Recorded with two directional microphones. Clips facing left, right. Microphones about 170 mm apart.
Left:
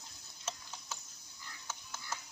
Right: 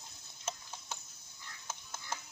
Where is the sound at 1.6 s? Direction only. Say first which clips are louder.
Right 1 dB; 25° right (ahead or behind).